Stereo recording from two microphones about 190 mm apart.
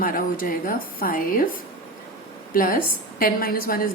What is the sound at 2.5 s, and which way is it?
A woman's voice, 50° left (ahead or behind).